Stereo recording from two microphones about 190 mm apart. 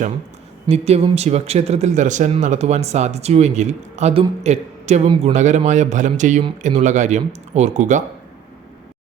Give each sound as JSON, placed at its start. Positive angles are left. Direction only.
{"t": 0.7, "sound": "speech", "side_deg": -35}